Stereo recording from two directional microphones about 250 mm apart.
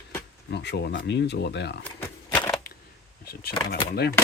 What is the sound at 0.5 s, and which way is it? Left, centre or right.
Speech, left.